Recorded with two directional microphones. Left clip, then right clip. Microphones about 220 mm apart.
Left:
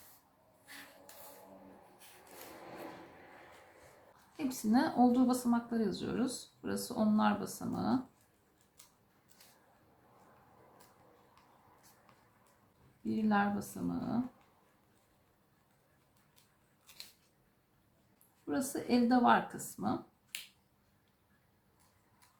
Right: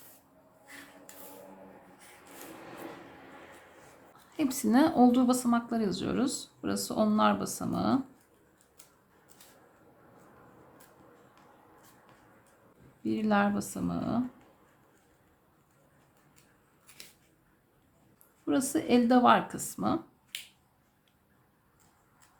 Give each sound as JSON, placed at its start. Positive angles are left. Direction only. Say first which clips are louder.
{"t": 4.4, "sound": "a woman's voice", "louder": "right 7 dB", "side_deg": -35}
{"t": 13.1, "sound": "a woman's voice", "louder": "right 5 dB", "side_deg": -35}
{"t": 18.4, "sound": "a woman's voice", "louder": "right 7 dB", "side_deg": -35}